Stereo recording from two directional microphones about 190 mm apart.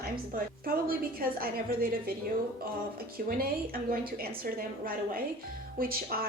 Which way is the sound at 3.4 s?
50° right (ahead or behind).